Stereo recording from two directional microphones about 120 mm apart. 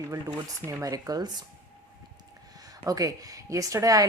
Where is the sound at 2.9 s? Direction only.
30° right (ahead or behind).